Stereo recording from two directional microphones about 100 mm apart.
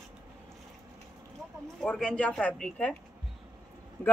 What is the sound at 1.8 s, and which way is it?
Speech, 10° left (ahead or behind).